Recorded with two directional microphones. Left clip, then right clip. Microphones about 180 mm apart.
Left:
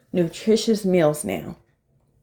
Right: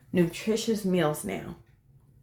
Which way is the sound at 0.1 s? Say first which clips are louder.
Left 7 dB; 15° left (ahead or behind).